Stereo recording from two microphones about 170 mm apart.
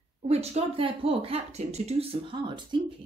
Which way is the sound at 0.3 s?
40° right (ahead or behind).